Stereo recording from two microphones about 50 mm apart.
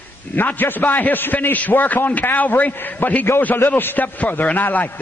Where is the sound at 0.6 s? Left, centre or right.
Left.